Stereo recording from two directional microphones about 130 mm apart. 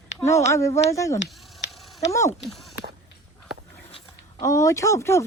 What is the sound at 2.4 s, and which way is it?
Speech, centre (ahead or behind).